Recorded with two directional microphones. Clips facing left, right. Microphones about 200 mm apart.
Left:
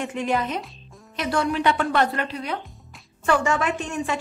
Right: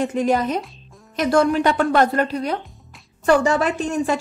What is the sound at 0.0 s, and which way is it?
Speech, 40° right (ahead or behind).